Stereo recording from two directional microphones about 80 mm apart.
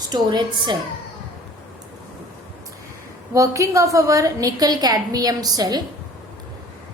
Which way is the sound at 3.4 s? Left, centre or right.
Right.